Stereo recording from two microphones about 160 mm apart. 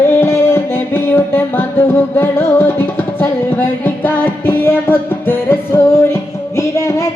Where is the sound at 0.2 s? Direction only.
15° left (ahead or behind).